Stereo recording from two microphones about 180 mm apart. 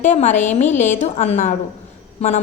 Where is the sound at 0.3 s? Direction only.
10° left (ahead or behind).